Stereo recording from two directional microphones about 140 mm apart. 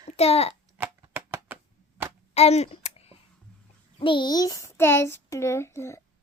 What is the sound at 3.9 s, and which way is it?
A child's voice, 35° left (ahead or behind).